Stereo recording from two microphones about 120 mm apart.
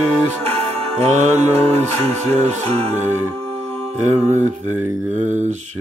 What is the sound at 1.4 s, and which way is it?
Music, 60° right (ahead or behind).